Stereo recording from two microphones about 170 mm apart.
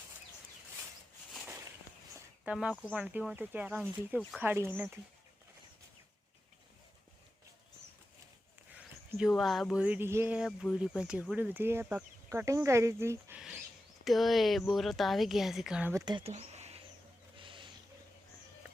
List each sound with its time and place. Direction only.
2.4 s speech: 5° right (ahead or behind)
9.1 s speech: centre (ahead or behind)
14.0 s speech: centre (ahead or behind)
16.0 s speech: 30° right (ahead or behind)
16.3 s a sound: 40° right (ahead or behind)
17.4 s bird: 30° right (ahead or behind)